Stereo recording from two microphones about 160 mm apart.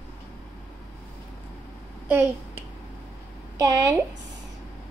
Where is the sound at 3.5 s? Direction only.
20° right (ahead or behind).